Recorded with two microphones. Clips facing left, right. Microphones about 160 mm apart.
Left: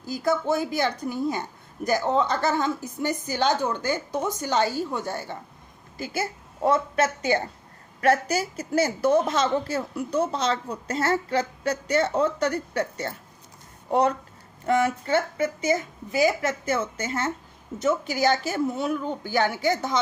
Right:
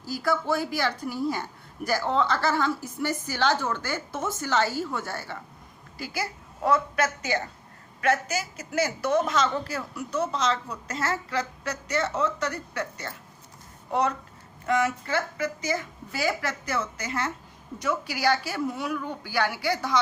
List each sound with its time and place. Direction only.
0.0 s a woman's voice: 20° left (ahead or behind)
18.5 s a woman's voice: 25° left (ahead or behind)